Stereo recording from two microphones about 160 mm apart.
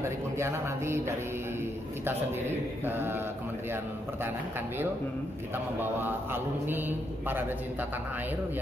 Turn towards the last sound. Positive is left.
turn(degrees=-10)  # may be behind; listen again after turning